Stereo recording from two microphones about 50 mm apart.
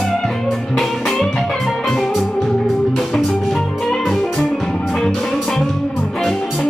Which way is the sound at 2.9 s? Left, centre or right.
Centre.